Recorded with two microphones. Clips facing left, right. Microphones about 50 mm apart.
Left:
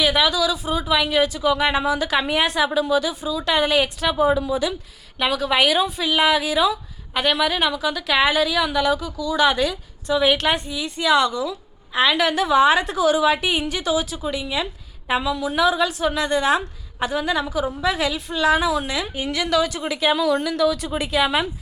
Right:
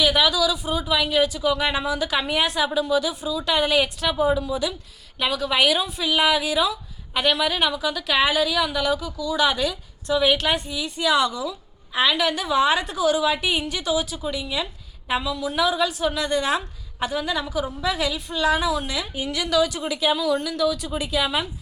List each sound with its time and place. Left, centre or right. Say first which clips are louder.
0.0 s a woman's voice: left 1 dB; centre
11.9 s a woman's voice: left 3 dB; centre
19.3 s a woman's voice: left 1 dB; left
20.1 s a woman's voice: left 3 dB; centre